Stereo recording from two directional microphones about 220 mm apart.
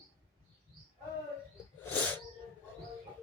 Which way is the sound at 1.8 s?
10° left (ahead or behind).